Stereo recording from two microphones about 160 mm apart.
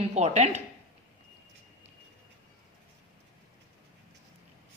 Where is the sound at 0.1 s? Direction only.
45° right (ahead or behind).